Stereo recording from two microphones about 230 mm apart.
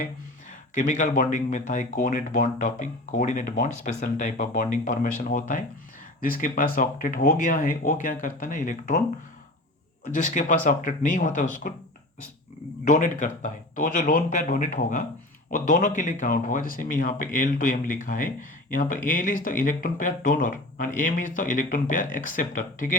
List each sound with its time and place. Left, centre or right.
0.7 s speech: left
10.1 s speech: left
12.8 s speech: left